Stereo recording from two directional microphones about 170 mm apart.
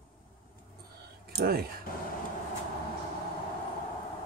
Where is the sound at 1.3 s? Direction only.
65° right (ahead or behind).